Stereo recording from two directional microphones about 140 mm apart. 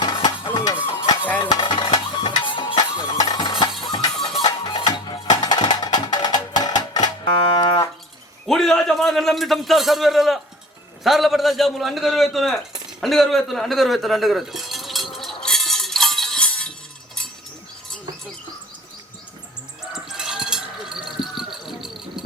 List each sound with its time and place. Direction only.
0.0 s a sound: 30° left (ahead or behind)
0.5 s mechanisms: 30° left (ahead or behind)
1.0 s stir: 30° left (ahead or behind)
2.4 s music: 35° left (ahead or behind)
8.4 s a man's voice: 5° left (ahead or behind)
15.4 s music: centre (ahead or behind)
20.1 s a sound: 5° right (ahead or behind)